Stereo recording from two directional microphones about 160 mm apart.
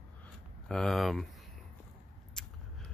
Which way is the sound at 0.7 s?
Centre (ahead or behind).